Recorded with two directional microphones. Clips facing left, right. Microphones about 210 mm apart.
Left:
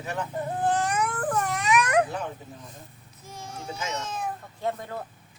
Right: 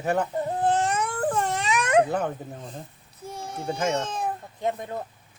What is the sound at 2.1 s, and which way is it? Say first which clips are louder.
Speech: right 6 dB; 55° right (ahead or behind).